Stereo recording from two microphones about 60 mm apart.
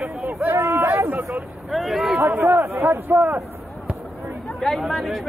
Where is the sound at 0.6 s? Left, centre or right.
Right.